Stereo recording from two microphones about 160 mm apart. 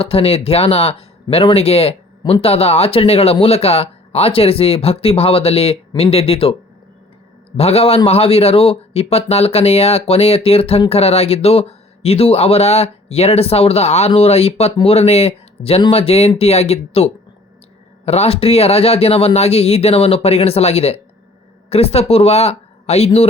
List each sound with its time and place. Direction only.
0.0 s speech: 35° left (ahead or behind)